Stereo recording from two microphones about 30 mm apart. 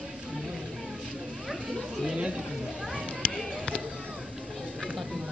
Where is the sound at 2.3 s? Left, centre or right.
Centre.